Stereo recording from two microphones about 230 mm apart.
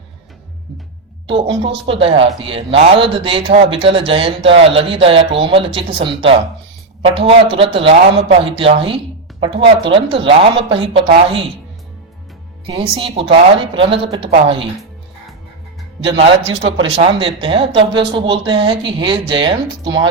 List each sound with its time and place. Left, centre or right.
1.3 s speech: right
12.6 s speech: right
16.6 s speech: right
17.2 s speech: right